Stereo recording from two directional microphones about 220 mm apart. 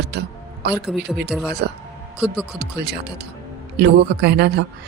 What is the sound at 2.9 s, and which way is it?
Speech, 50° right (ahead or behind).